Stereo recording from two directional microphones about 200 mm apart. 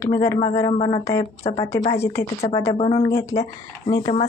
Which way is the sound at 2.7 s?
25° left (ahead or behind).